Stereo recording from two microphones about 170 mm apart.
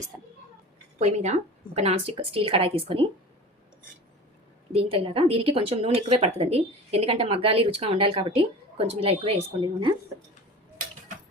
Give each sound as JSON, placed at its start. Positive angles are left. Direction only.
{"t": 0.9, "sound": "a woman's voice", "side_deg": -40}
{"t": 4.7, "sound": "a woman's voice", "side_deg": -35}